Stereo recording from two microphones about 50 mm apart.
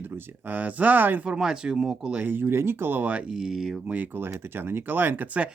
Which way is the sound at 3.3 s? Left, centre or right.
Centre.